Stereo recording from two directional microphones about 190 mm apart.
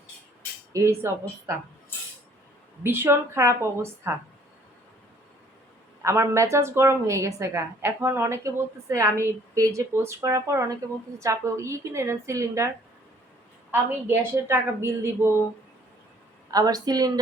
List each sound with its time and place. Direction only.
0.7 s a woman's voice: 15° right (ahead or behind)
2.8 s a woman's voice: 10° right (ahead or behind)
6.0 s a woman's voice: 15° right (ahead or behind)
16.5 s a woman's voice: 20° right (ahead or behind)